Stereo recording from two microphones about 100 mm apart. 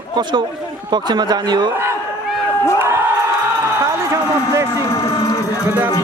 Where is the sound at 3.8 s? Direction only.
30° right (ahead or behind).